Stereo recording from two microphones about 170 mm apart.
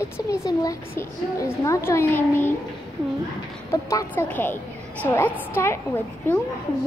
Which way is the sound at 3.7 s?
15° left (ahead or behind).